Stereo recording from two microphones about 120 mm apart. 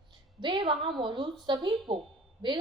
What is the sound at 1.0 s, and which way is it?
A woman's voice, 40° right (ahead or behind).